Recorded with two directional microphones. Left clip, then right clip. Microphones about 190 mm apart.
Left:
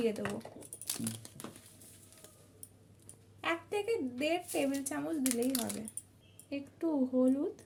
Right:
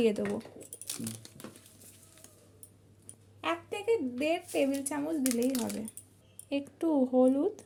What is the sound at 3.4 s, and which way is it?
Speech, 20° right (ahead or behind).